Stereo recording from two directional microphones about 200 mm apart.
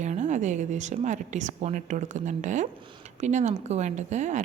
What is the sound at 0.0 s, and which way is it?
Speech, 35° right (ahead or behind).